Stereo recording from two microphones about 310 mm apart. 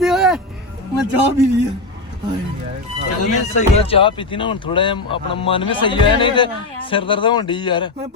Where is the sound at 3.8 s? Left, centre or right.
Centre.